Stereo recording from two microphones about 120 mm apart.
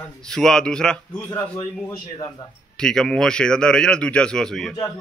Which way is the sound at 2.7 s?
5° left (ahead or behind).